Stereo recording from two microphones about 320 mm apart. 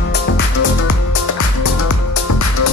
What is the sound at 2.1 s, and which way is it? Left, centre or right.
Music, left.